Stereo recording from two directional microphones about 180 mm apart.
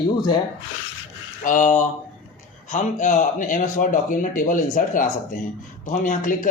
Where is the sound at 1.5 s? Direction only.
45° left (ahead or behind).